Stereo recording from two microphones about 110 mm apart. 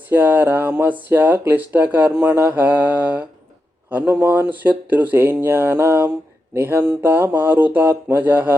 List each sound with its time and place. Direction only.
0.1 s speech: 15° right (ahead or behind)